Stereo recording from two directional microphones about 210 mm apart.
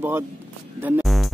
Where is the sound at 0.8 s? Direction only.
5° right (ahead or behind).